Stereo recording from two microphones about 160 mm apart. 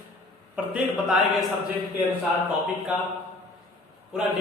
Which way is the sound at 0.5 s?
5° right (ahead or behind).